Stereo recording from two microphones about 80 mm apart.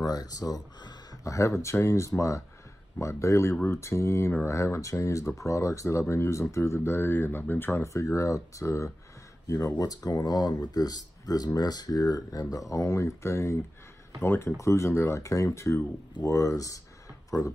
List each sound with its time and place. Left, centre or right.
0.0 s speech: left
7.8 s speech: left